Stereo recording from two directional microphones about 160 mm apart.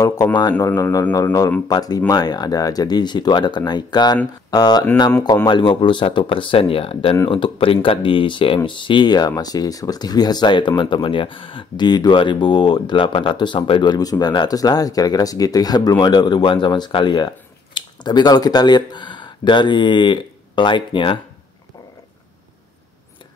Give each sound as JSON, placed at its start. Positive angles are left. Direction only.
{"t": 0.4, "sound": "speech", "side_deg": 25}